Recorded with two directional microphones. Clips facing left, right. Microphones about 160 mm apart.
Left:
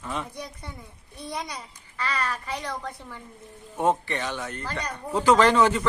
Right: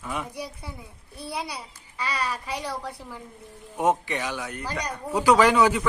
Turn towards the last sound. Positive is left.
turn(degrees=-10)  # may be behind; listen again after turning